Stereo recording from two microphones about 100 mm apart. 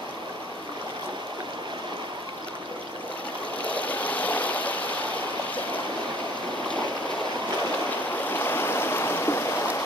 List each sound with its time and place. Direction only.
3.6 s stream: 15° left (ahead or behind)
8.3 s stream: 20° left (ahead or behind)